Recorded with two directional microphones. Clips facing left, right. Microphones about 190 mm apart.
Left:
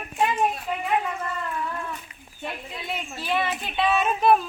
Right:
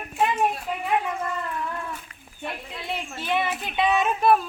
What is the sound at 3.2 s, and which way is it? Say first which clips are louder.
Speech: even; 20° right (ahead or behind).